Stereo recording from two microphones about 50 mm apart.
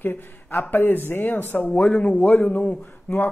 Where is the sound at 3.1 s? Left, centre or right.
Left.